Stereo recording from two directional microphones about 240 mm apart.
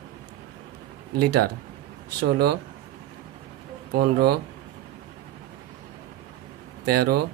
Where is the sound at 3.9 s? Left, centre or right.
Right.